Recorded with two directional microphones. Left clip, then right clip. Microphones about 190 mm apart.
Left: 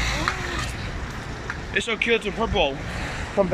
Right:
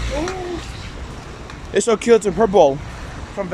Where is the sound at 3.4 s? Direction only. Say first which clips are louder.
Left 4 dB; 10° left (ahead or behind).